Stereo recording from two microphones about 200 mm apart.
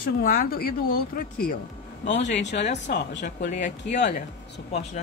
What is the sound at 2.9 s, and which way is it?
Speech, 50° left (ahead or behind).